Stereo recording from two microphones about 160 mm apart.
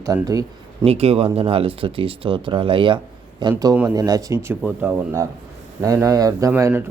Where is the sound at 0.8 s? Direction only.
40° right (ahead or behind); by 4.5 s 20° right (ahead or behind).